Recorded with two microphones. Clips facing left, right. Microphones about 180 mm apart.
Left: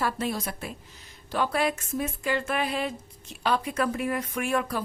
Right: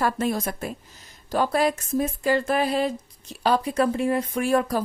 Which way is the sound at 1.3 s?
40° right (ahead or behind).